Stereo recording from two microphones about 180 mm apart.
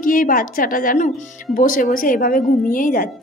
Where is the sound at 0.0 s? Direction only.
50° left (ahead or behind).